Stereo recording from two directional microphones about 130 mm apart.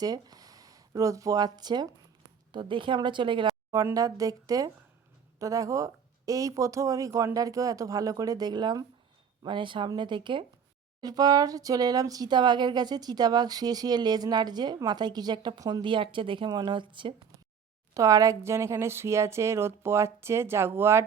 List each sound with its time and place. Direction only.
0.0 s speech: 30° right (ahead or behind)
17.9 s speech: 25° right (ahead or behind)